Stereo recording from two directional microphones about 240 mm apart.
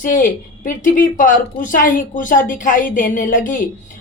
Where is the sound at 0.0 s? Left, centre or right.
Left.